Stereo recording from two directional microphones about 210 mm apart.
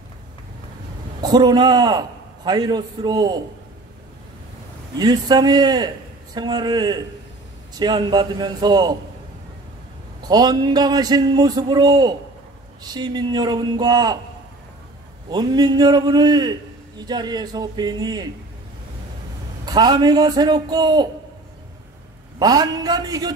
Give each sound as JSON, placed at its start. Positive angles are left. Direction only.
{"t": 1.2, "sound": "a man's voice", "side_deg": -20}
{"t": 4.9, "sound": "a man's voice", "side_deg": -20}
{"t": 10.2, "sound": "a man's voice", "side_deg": -20}
{"t": 15.2, "sound": "a man's voice", "side_deg": -20}
{"t": 19.6, "sound": "a man's voice", "side_deg": -20}
{"t": 22.4, "sound": "a man's voice", "side_deg": -20}